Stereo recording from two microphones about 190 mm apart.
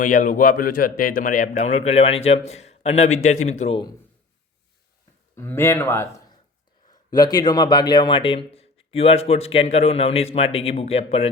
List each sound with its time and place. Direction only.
0.0 s a man's voice: 45° left (ahead or behind)
5.4 s a man's voice: 15° left (ahead or behind); by 11.3 s 30° left (ahead or behind)